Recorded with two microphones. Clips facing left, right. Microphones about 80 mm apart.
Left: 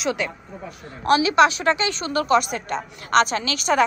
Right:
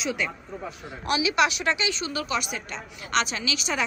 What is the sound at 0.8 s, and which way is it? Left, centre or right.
Speech, left.